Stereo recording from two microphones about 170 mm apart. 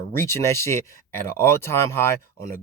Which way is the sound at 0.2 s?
15° left (ahead or behind).